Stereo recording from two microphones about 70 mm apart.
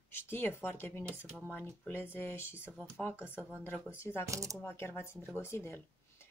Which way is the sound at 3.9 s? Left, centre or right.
Left.